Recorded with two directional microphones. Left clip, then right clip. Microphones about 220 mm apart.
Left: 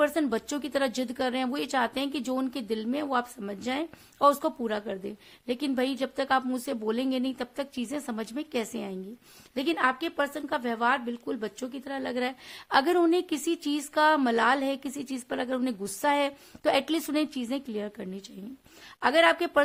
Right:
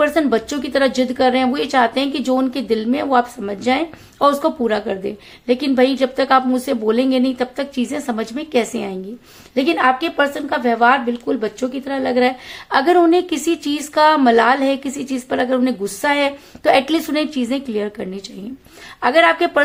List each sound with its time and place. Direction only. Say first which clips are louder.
0.0 s a woman's voice: right 11 dB; 40° left (ahead or behind)